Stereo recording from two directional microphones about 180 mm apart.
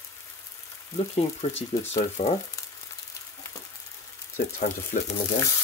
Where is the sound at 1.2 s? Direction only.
35° left (ahead or behind).